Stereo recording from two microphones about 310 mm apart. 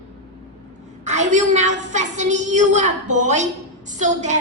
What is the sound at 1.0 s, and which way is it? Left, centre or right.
A woman's voice, right.